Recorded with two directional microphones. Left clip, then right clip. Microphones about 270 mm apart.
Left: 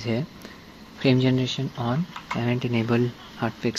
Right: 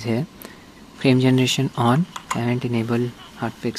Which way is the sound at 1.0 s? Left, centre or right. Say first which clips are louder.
Right 4 dB; centre.